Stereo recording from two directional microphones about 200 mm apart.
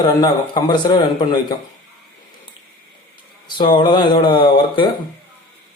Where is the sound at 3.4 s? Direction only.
25° left (ahead or behind).